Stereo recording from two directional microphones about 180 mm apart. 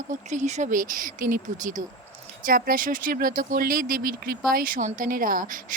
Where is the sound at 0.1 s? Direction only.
40° right (ahead or behind).